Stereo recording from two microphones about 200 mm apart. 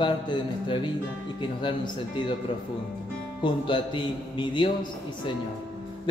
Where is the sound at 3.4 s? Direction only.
25° left (ahead or behind).